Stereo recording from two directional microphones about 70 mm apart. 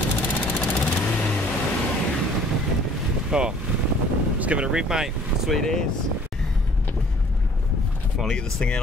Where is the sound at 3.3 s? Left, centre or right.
Centre.